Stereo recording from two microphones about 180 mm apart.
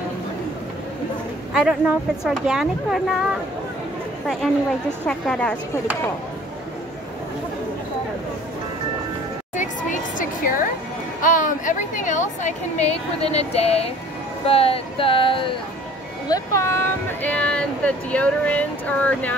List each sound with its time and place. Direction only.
1.5 s speech: 5° right (ahead or behind)
4.4 s speech: centre (ahead or behind)
9.6 s music: 45° left (ahead or behind)
11.1 s a woman's voice: 45° left (ahead or behind); by 15.5 s 30° left (ahead or behind)
16.3 s speech: 20° left (ahead or behind)